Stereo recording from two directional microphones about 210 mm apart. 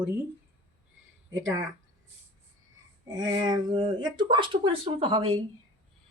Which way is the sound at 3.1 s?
20° right (ahead or behind).